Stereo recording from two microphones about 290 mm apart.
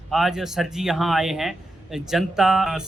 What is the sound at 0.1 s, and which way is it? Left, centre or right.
A man's voice, centre.